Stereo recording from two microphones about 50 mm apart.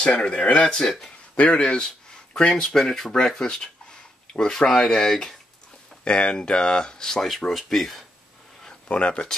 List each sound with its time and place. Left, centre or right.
0.0 s speech: centre
1.3 s speech: left
1.6 s a sound: centre
2.5 s speech: centre
6.0 s speech: centre
7.2 s speech: centre
8.8 s speech: left